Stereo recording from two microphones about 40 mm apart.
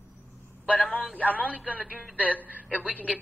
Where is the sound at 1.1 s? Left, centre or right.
Left.